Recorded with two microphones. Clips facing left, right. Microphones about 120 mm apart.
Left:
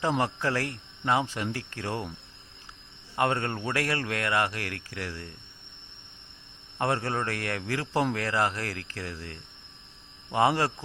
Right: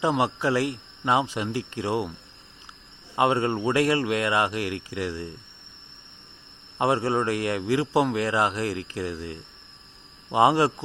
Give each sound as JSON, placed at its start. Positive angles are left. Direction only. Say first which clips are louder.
{"t": 0.0, "sound": "speech", "louder": "right 4 dB", "side_deg": -15}
{"t": 3.2, "sound": "speech", "louder": "right 5 dB", "side_deg": -15}
{"t": 6.7, "sound": "speech", "louder": "right 5 dB", "side_deg": -15}